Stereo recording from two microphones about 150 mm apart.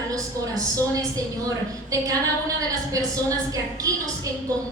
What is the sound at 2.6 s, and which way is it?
A woman's voice, 20° right (ahead or behind).